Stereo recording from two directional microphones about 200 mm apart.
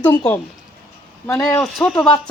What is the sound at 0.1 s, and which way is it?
Speech, 20° left (ahead or behind).